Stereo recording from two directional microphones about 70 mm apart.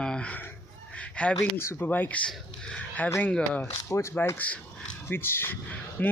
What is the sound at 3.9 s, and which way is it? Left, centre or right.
Speech, left.